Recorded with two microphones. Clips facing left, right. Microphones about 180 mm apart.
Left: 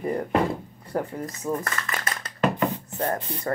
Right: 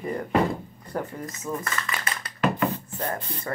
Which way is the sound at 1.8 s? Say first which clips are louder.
Left 1 dB; 45° left (ahead or behind).